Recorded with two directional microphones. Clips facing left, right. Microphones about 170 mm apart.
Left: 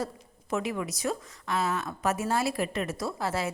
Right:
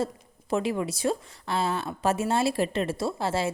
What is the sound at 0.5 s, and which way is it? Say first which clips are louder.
A woman's voice: right 4 dB; 30° right (ahead or behind).